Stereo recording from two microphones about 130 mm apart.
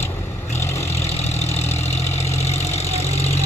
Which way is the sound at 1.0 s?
55° left (ahead or behind).